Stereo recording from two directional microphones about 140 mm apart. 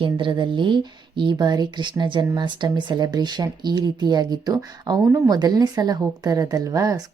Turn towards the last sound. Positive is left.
turn(degrees=-25)  # may be behind; listen again after turning